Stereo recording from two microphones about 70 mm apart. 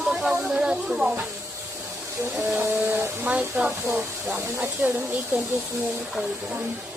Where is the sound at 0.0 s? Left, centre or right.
Centre.